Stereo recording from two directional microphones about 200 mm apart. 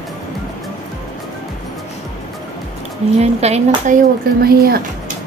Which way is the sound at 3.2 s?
30° right (ahead or behind).